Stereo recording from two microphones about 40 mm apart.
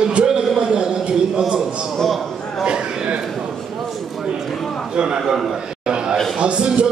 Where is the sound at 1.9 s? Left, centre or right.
Centre.